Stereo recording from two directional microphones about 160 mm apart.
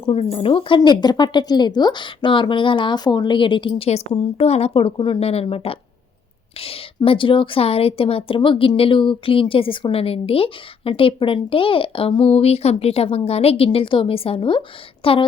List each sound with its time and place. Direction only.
0.0 s a woman's voice: 40° left (ahead or behind)